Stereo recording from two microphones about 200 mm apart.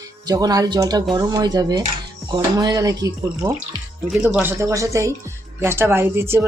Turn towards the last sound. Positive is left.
turn(degrees=-10)  # may be behind; listen again after turning